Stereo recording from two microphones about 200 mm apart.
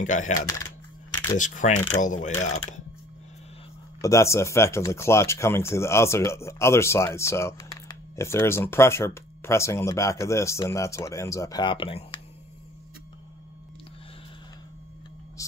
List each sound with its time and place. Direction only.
0.0 s speech: 40° left (ahead or behind)
1.1 s camera: 20° left (ahead or behind)
1.4 s speech: 40° left (ahead or behind)
4.0 s speech: 15° left (ahead or behind)